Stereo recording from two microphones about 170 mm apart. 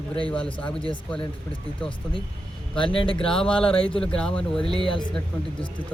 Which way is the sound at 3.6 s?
30° left (ahead or behind).